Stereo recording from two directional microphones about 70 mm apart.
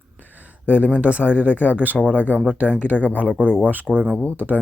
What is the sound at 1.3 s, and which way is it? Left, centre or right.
Speech, centre.